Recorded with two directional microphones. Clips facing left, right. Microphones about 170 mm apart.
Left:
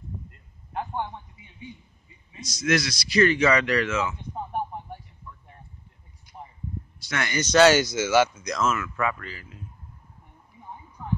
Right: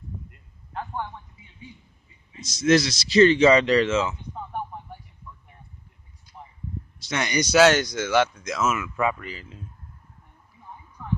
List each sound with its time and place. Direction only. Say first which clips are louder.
0.7 s a sound: left 2 dB; 20° left (ahead or behind)
2.4 s a man's voice: right 5 dB; 25° right (ahead or behind)
7.0 s a man's voice: right 3 dB; 20° right (ahead or behind)
7.5 s speech: left 1 dB; centre (ahead or behind); by 9.6 s 20° right (ahead or behind)